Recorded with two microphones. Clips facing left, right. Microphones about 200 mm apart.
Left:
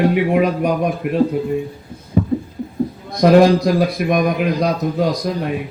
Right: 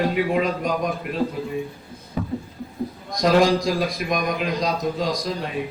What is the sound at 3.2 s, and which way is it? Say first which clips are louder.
A man's voice: left 7 dB; 60° left (ahead or behind).